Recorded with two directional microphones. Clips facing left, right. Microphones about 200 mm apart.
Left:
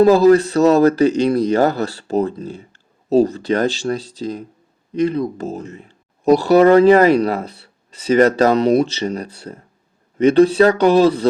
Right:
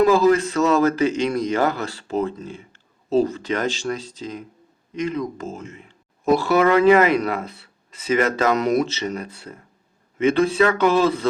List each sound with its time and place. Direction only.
0.0 s speech: 35° left (ahead or behind)